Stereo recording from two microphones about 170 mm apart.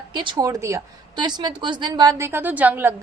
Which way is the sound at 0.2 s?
25° right (ahead or behind).